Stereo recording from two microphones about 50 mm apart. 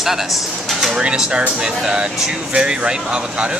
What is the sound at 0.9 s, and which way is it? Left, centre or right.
Speech, centre.